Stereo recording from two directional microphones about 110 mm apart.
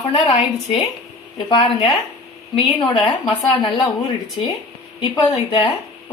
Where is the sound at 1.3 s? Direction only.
45° left (ahead or behind).